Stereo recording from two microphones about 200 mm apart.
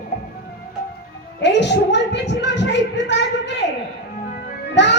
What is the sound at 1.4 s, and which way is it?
A woman's voice, 60° left (ahead or behind).